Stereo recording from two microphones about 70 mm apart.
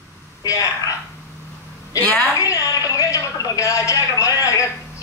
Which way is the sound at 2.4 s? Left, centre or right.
Left.